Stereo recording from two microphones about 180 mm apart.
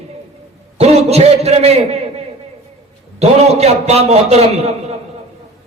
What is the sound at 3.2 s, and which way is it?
A man's voice, 35° right (ahead or behind).